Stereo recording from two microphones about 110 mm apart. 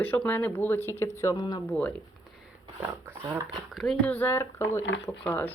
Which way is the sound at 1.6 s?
10° left (ahead or behind).